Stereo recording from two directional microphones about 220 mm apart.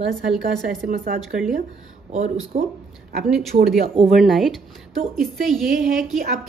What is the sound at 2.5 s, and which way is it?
Speech, 40° right (ahead or behind).